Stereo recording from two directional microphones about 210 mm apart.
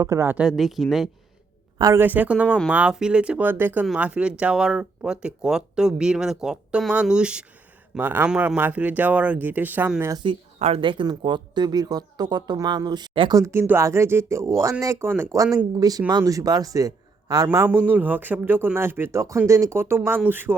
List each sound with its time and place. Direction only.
0.0 s speech: 15° right (ahead or behind)
1.8 s speech: 10° right (ahead or behind)
10.2 s speech: 25° right (ahead or behind); by 20.6 s 10° right (ahead or behind)